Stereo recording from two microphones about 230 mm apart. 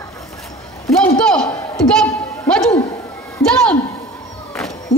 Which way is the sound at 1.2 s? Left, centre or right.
Centre.